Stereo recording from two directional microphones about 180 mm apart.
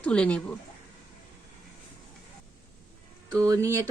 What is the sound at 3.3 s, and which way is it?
Speech, 20° right (ahead or behind).